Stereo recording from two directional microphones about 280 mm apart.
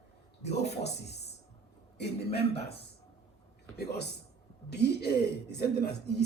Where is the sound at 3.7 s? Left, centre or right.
Left.